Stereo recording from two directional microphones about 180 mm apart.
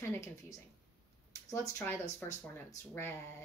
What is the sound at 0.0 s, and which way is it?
Speech, 15° left (ahead or behind).